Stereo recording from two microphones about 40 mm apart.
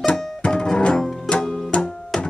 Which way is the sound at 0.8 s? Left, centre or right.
Left.